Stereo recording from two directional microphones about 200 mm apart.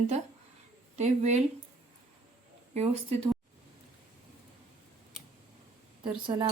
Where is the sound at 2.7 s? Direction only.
30° right (ahead or behind).